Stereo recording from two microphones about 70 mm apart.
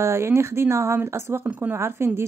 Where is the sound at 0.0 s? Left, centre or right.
Right.